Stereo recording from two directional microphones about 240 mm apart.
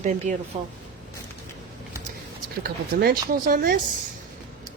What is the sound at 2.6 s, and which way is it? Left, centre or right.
Speech, right.